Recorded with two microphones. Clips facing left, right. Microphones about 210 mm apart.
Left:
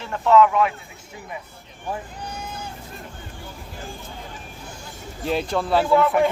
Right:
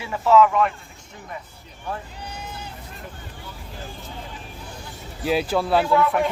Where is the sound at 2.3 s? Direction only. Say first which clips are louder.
Left 1 dB; 50° left (ahead or behind).